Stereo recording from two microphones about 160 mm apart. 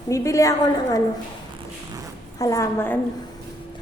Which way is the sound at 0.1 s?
20° left (ahead or behind).